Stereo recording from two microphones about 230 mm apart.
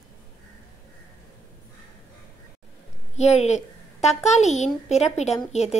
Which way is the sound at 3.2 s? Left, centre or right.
Left.